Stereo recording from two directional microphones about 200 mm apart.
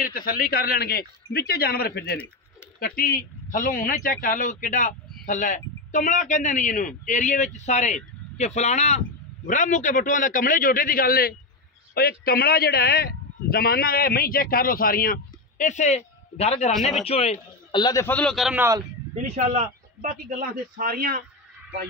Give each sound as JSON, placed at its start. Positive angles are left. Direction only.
{"t": 0.0, "sound": "a man's voice", "side_deg": 45}
{"t": 16.7, "sound": "speech", "side_deg": 0}
{"t": 17.0, "sound": "a man's voice", "side_deg": 30}
{"t": 19.2, "sound": "speech", "side_deg": -35}